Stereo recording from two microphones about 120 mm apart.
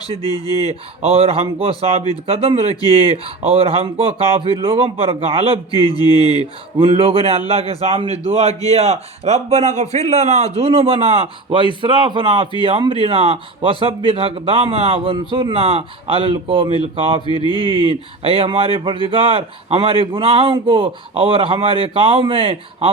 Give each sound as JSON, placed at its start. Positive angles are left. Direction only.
{"t": 0.2, "sound": "speech", "side_deg": 35}
{"t": 0.7, "sound": "a man's voice", "side_deg": -55}
{"t": 5.7, "sound": "speech", "side_deg": 35}
{"t": 6.7, "sound": "a man's voice", "side_deg": -50}
{"t": 17.2, "sound": "speech", "side_deg": 40}
{"t": 18.2, "sound": "speech", "side_deg": -50}